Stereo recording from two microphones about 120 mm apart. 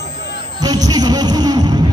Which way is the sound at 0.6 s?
35° right (ahead or behind).